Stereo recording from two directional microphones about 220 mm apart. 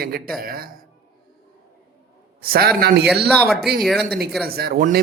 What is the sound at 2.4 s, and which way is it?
Speech, 45° right (ahead or behind).